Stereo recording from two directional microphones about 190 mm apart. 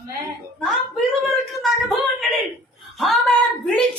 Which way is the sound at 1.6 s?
Centre (ahead or behind).